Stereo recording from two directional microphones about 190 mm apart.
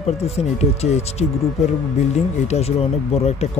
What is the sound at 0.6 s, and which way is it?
Speech, 35° left (ahead or behind).